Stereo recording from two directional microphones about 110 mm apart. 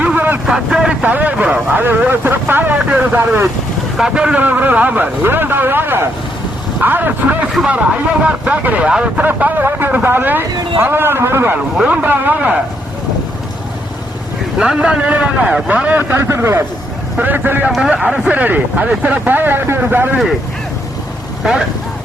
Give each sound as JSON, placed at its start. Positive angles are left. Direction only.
{"t": 0.0, "sound": "vehicle", "side_deg": -15}
{"t": 0.4, "sound": "a man's voice", "side_deg": -5}
{"t": 14.6, "sound": "speech", "side_deg": -10}
{"t": 17.7, "sound": "speech", "side_deg": -5}
{"t": 21.4, "sound": "speech", "side_deg": -5}